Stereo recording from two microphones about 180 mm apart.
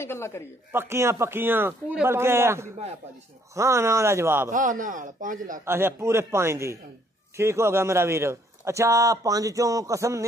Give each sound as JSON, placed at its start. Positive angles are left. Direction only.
{"t": 0.0, "sound": "speech", "side_deg": 15}
{"t": 0.7, "sound": "a man's voice", "side_deg": -15}
{"t": 4.5, "sound": "a man's voice", "side_deg": -45}
{"t": 5.7, "sound": "a man's voice", "side_deg": -15}